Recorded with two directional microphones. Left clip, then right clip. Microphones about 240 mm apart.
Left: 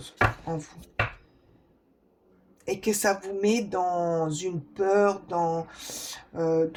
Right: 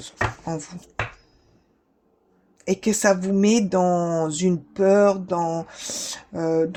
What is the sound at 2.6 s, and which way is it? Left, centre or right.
Speech, right.